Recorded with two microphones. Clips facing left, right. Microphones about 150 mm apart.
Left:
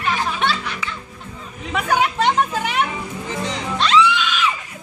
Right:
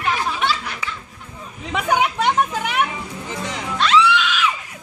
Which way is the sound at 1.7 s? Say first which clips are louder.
Even; 15° right (ahead or behind).